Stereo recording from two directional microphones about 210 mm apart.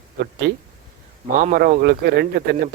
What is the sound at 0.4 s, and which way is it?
Speech, 50° right (ahead or behind).